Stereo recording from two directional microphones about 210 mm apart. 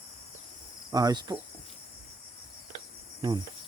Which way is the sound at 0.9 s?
20° right (ahead or behind).